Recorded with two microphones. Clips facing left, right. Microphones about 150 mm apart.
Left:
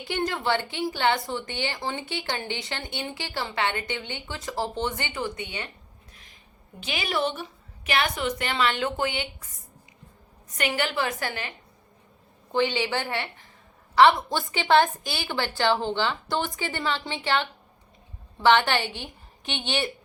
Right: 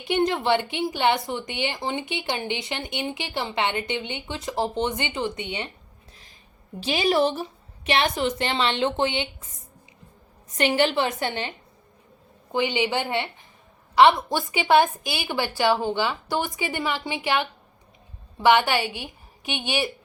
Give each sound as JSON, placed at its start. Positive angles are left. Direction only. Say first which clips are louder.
{"t": 0.0, "sound": "speech", "louder": "right 5 dB", "side_deg": -20}
{"t": 6.7, "sound": "a woman's voice", "louder": "right 7 dB", "side_deg": -30}
{"t": 18.3, "sound": "a woman's voice", "louder": "right 1 dB", "side_deg": -10}